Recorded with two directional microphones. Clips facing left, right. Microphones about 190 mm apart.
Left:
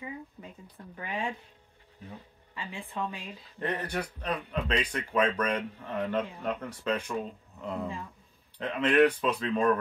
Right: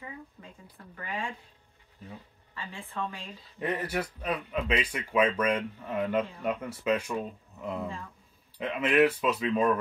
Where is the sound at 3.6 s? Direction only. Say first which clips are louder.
Right 2 dB; 5° right (ahead or behind).